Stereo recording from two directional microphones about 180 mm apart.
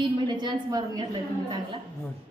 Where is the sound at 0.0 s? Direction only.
25° right (ahead or behind).